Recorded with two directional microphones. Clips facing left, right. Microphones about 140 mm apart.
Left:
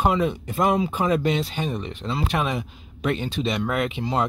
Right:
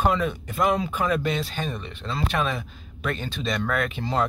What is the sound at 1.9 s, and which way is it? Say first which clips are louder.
Speech: left 4 dB; 30° left (ahead or behind).